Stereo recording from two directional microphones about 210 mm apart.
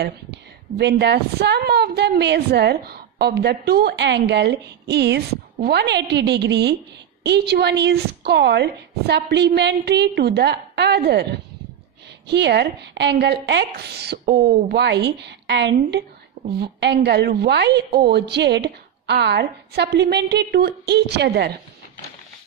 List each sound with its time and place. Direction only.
0.7 s a woman's voice: 55° right (ahead or behind)
12.3 s a woman's voice: 55° right (ahead or behind)